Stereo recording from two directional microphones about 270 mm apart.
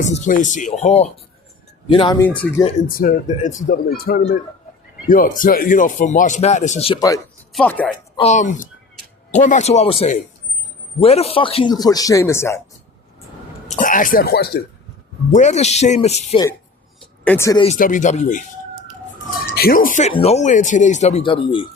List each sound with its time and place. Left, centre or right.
0.0 s speech: left
2.6 s speech: left; by 7.9 s centre
8.1 s speech: left
13.7 s speech: left
15.3 s speech: left
17.2 s speech: centre
17.7 s speech: left
19.5 s speech: left